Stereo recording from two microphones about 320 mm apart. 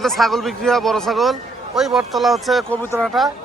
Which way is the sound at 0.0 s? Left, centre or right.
Centre.